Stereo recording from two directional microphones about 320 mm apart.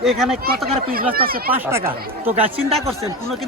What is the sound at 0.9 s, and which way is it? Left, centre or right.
Speech, right.